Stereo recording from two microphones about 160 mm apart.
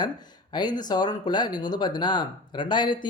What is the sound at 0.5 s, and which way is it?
Speech, 25° left (ahead or behind).